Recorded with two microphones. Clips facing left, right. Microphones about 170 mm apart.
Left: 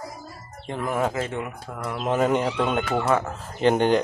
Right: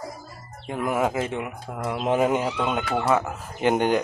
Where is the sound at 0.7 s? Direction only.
10° right (ahead or behind).